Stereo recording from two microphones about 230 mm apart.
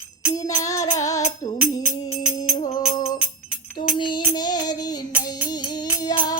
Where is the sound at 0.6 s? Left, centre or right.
Centre.